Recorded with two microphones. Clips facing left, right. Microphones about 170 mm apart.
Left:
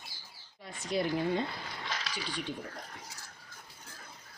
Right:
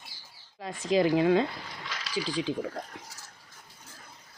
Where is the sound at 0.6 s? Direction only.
90° right.